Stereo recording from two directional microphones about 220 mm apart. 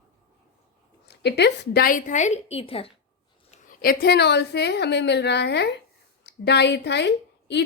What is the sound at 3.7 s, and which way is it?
A woman's voice, 45° left (ahead or behind).